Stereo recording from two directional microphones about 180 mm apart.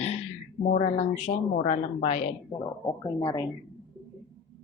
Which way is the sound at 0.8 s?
40° left (ahead or behind).